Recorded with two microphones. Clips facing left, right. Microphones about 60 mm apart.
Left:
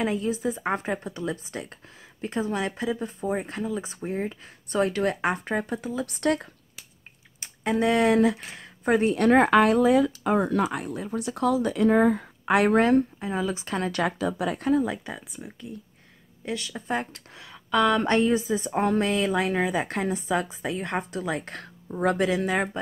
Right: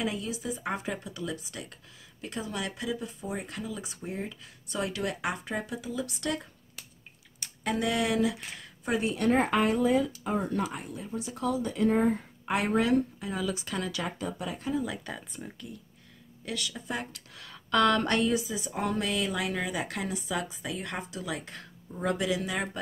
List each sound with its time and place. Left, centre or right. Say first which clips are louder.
0.0 s a woman's voice: left 7 dB; left
7.3 s speech: left 6 dB; left
9.2 s speech: left 7 dB; left
12.7 s speech: left 3 dB; left
13.2 s a woman's voice: left 4 dB; left
14.0 s speech: left 8 dB; left
15.0 s speech: left 2 dB; centre
16.4 s a woman's voice: left 5 dB; left
17.4 s speech: left 2 dB; centre
18.0 s a woman's voice: left 5 dB; left